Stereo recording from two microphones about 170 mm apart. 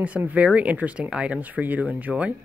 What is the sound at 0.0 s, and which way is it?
Speech, 10° right (ahead or behind).